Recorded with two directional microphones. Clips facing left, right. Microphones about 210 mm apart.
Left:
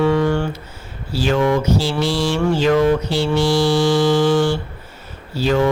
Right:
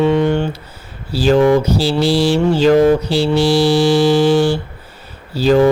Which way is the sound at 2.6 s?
35° right (ahead or behind).